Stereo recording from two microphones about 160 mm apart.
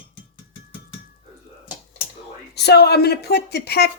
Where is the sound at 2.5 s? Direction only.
90° left.